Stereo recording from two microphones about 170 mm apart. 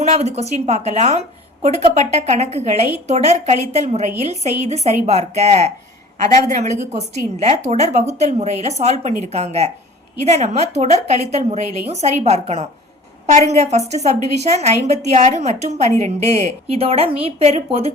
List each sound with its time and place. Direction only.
0.1 s a woman's voice: 40° right (ahead or behind)